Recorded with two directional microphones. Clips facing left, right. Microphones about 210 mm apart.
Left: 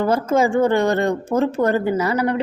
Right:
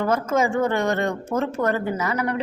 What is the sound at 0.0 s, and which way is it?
A woman's voice, 30° left (ahead or behind).